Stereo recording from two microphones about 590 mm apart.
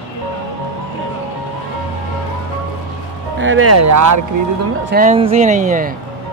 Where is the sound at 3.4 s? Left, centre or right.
Right.